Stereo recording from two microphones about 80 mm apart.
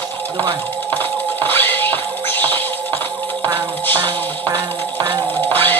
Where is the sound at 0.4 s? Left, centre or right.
Left.